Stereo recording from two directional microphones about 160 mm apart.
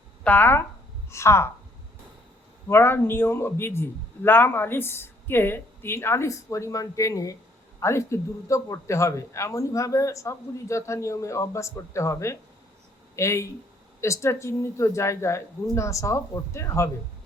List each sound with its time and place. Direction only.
0.3 s a man's voice: 10° left (ahead or behind)
2.6 s a man's voice: 15° left (ahead or behind)